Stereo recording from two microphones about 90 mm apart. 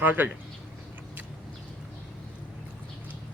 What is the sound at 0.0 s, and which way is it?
Speech, 20° right (ahead or behind).